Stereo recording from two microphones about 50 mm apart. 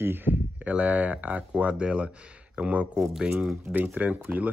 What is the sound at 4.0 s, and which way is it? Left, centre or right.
Speech, right.